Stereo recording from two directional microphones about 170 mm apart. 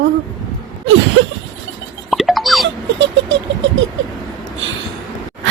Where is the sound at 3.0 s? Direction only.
90° right.